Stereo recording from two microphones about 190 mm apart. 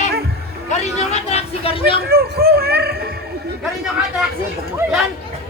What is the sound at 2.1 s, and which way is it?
Speech, 55° right (ahead or behind).